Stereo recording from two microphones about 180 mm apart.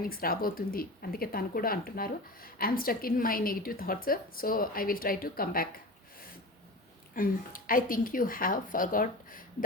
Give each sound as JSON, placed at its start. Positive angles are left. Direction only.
{"t": 0.0, "sound": "speech", "side_deg": 55}
{"t": 7.1, "sound": "speech", "side_deg": 50}